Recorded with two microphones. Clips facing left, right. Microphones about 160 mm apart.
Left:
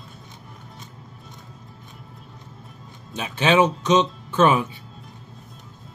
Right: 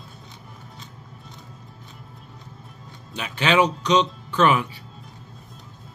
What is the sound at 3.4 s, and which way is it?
Speech, 20° left (ahead or behind).